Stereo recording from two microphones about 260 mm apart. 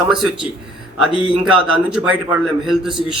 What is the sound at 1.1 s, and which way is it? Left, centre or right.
Speech, centre.